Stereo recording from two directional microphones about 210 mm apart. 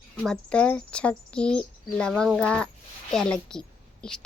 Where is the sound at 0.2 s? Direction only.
5° left (ahead or behind).